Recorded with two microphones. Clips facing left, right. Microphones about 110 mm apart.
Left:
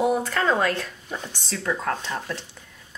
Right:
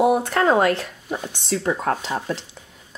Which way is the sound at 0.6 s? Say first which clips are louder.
Right 5 dB; 20° right (ahead or behind).